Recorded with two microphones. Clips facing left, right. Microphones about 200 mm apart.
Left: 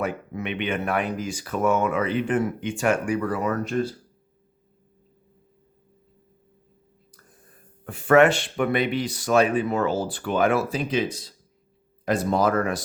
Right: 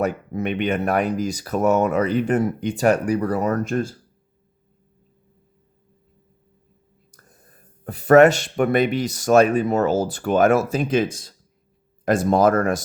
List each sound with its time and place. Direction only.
0.0 s speech: 40° right (ahead or behind)
7.9 s speech: 40° right (ahead or behind)